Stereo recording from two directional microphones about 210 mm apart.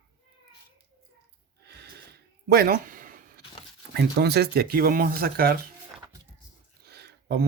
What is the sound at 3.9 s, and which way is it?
Speech, 50° right (ahead or behind).